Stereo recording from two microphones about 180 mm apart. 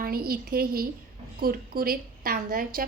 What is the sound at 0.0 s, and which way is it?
A woman's voice, 55° right (ahead or behind).